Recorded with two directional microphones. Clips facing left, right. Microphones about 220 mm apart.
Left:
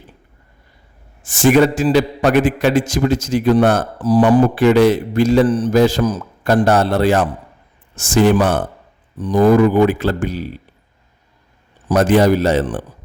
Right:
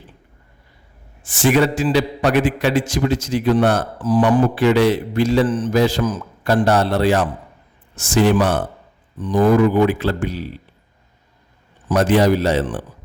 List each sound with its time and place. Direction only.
1.2 s a man's voice: 45° left (ahead or behind)
9.1 s a man's voice: 40° left (ahead or behind)
11.9 s a man's voice: 45° left (ahead or behind)